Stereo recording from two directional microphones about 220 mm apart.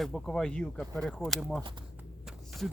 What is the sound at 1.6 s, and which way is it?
Speech, 20° right (ahead or behind).